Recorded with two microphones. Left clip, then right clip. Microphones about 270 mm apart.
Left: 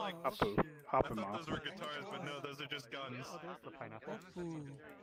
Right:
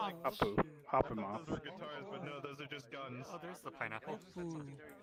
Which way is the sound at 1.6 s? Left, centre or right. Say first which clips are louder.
Left 3 dB; centre.